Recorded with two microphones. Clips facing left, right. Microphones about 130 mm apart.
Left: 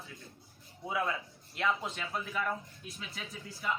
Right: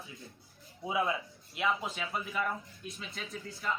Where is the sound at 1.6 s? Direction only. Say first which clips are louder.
Right 1 dB; 5° right (ahead or behind).